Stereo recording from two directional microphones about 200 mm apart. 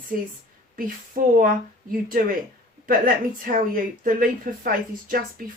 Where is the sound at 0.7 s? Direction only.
45° right (ahead or behind).